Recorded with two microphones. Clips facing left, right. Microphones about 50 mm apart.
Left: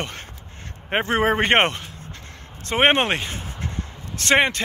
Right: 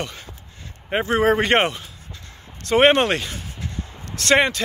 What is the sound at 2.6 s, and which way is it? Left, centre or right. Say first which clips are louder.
Speech: right 3 dB; left.